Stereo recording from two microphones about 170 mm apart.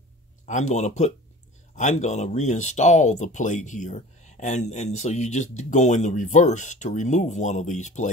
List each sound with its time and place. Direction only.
0.5 s speech: 45° left (ahead or behind)